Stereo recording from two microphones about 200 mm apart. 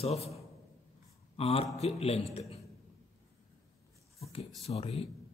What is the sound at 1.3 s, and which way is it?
Speech, 30° left (ahead or behind).